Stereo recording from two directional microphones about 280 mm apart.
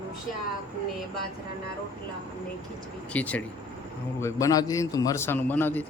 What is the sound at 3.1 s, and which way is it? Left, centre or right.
A man's voice, centre.